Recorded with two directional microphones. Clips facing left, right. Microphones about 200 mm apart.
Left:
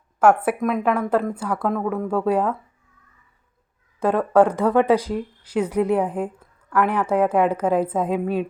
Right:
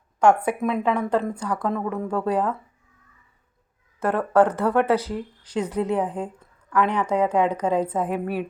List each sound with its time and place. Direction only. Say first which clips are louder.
0.2 s speech: left 2 dB; 5° left (ahead or behind)
4.0 s speech: left 2 dB; 10° left (ahead or behind)